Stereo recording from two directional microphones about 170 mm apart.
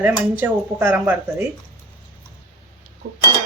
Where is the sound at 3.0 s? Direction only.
65° right (ahead or behind).